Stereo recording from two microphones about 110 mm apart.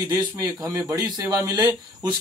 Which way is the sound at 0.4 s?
30° right (ahead or behind).